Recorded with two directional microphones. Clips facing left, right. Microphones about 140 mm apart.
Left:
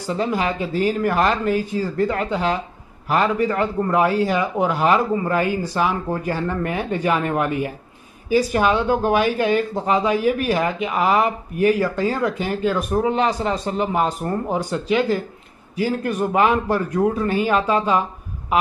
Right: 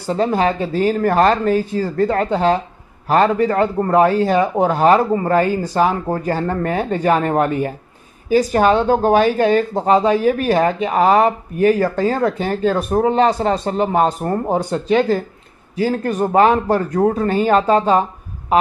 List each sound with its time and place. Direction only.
0.1 s speech: 35° right (ahead or behind)